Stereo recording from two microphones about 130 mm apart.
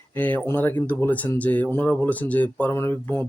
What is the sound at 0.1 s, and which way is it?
Speech, 15° left (ahead or behind).